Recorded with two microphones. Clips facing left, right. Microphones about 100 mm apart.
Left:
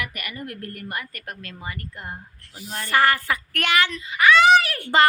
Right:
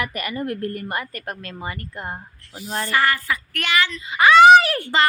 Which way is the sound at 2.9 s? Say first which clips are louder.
Left 2 dB; 50° left (ahead or behind).